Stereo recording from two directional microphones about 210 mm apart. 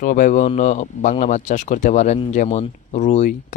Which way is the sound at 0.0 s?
40° left (ahead or behind).